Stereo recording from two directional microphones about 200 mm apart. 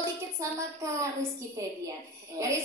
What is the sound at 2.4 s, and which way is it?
Speech, 15° right (ahead or behind).